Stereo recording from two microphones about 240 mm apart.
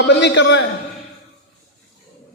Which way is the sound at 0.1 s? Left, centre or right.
Left.